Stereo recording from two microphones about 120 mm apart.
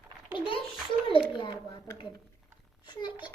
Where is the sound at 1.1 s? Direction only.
40° left (ahead or behind).